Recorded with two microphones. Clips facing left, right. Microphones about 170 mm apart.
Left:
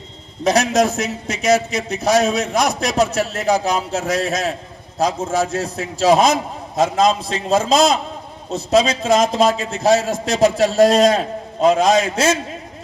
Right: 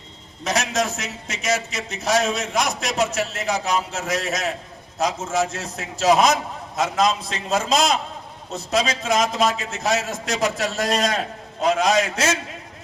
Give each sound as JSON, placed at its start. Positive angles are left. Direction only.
{"t": 0.4, "sound": "a man's voice", "side_deg": 35}